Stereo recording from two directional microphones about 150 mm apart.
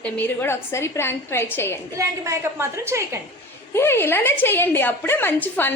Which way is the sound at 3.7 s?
15° left (ahead or behind).